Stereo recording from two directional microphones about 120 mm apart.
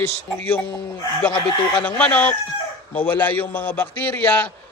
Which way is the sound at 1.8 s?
10° left (ahead or behind).